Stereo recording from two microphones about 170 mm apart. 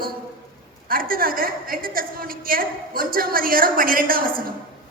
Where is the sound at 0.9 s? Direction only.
60° right (ahead or behind).